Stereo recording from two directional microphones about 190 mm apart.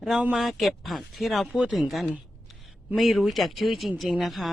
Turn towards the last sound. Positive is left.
turn(degrees=0)  # may be behind; listen again after turning